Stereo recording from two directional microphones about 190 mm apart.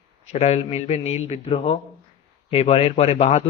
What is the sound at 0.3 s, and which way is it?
Speech, 35° left (ahead or behind).